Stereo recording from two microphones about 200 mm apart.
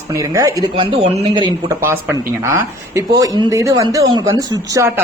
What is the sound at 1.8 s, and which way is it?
Speech, 15° right (ahead or behind).